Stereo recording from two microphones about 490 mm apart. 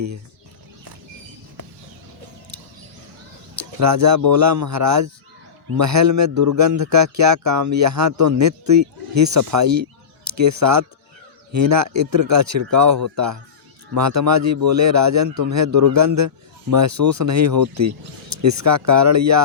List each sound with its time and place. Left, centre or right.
3.6 s a man's voice: right